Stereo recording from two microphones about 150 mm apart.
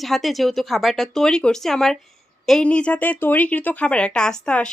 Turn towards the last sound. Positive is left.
turn(degrees=5)  # may be behind; listen again after turning